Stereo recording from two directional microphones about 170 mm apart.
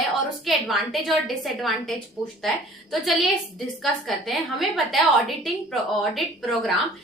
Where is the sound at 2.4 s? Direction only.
Centre (ahead or behind).